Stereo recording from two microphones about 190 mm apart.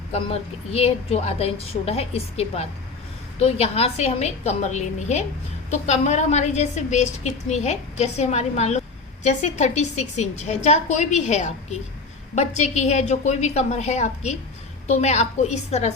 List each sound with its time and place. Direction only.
0.1 s a woman's voice: 30° left (ahead or behind)